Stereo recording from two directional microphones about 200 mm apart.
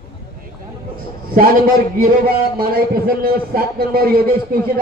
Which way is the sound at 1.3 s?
45° right (ahead or behind).